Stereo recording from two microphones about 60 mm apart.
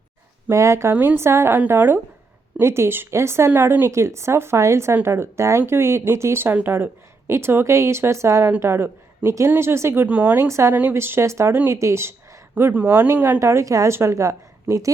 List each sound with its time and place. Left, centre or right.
0.5 s a woman's voice: right
2.6 s speech: right
3.5 s a woman's voice: right
3.9 s a woman's voice: right
10.1 s speech: right
10.3 s speech: right
12.7 s a woman's voice: right
13.4 s a woman's voice: right